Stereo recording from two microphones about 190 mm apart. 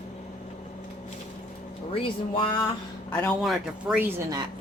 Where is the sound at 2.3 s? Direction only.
25° left (ahead or behind).